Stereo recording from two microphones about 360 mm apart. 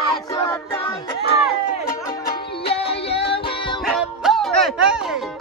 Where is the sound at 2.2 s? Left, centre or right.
Centre.